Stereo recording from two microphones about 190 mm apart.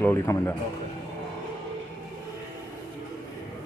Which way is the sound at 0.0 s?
15° left (ahead or behind).